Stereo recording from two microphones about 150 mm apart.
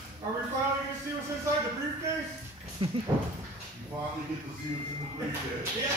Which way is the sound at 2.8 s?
35° right (ahead or behind).